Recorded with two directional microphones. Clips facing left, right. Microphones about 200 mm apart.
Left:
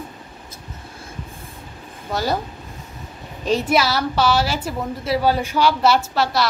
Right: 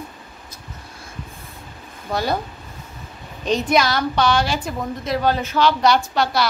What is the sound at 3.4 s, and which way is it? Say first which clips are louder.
A woman's voice: even; 5° left (ahead or behind).